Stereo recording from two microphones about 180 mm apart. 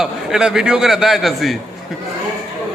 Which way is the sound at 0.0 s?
5° right (ahead or behind).